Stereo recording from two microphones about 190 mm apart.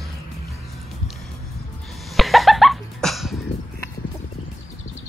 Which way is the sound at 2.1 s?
Centre (ahead or behind).